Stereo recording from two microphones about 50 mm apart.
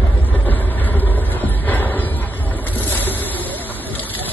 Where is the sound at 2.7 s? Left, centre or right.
Left.